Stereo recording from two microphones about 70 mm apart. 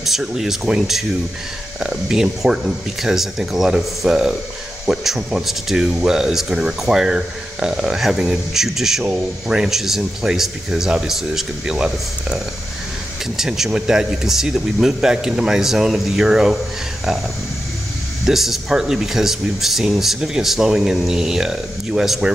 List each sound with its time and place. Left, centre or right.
0.0 s speech: centre
13.4 s speech: centre
18.2 s speech: centre